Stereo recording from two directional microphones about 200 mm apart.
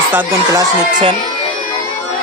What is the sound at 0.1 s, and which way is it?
Speech, 10° right (ahead or behind).